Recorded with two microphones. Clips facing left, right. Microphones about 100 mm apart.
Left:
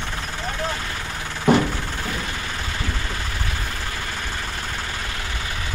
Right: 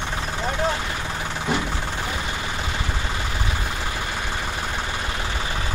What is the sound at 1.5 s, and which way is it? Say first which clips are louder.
Vehicle: left 9 dB; 60° left (ahead or behind).